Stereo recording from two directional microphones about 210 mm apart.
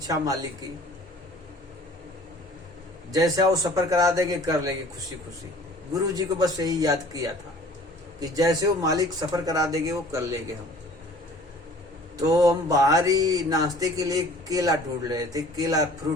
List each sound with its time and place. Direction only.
3.1 s mantra: 15° right (ahead or behind)
5.9 s mantra: 15° right (ahead or behind)
12.1 s mantra: 15° right (ahead or behind)